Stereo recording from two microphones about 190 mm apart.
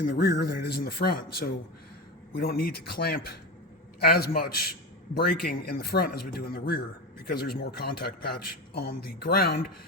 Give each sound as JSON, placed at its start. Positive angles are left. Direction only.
{"t": 0.0, "sound": "a man's voice", "side_deg": 55}